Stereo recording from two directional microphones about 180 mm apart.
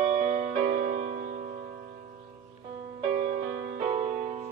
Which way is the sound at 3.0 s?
45° right (ahead or behind).